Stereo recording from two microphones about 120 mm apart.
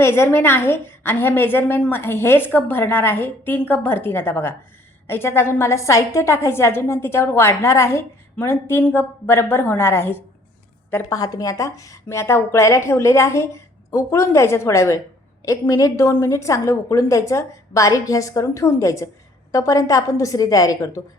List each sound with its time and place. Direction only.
0.0 s a woman's voice: 20° left (ahead or behind)
10.9 s a woman's voice: 30° left (ahead or behind)